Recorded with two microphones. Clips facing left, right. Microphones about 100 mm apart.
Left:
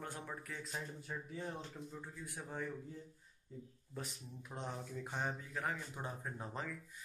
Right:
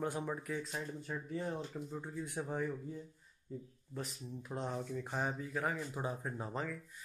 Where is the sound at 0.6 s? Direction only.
Centre (ahead or behind).